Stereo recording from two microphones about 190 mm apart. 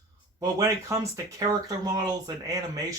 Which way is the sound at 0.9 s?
20° right (ahead or behind).